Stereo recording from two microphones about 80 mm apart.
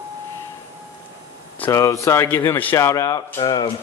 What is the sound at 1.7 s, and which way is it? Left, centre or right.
Speech, left.